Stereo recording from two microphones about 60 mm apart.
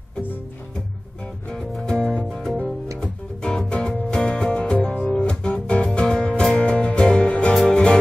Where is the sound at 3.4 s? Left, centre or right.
Centre.